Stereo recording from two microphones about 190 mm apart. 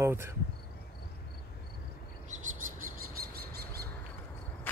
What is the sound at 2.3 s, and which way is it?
Bird vocalization, 40° right (ahead or behind).